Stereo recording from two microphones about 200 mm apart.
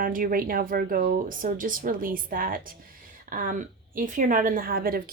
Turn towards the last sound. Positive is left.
turn(degrees=-45)  # may be behind; listen again after turning